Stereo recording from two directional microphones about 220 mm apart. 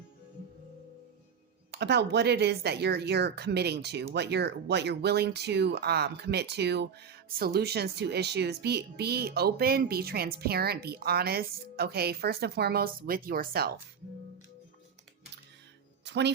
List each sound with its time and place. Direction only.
1.7 s a woman's voice: 50° right (ahead or behind)
16.0 s speech: 50° right (ahead or behind)